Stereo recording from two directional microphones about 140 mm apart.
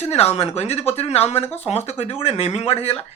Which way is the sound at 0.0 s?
50° left (ahead or behind).